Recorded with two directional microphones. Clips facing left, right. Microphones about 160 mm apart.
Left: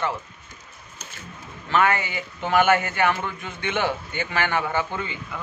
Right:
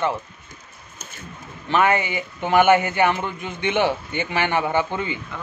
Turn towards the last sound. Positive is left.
turn(degrees=-20)  # may be behind; listen again after turning